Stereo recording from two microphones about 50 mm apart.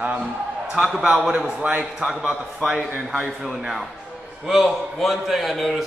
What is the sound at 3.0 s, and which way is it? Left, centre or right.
A man's voice, centre.